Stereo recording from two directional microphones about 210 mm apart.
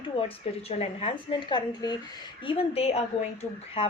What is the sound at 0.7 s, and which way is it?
Speech, 30° left (ahead or behind).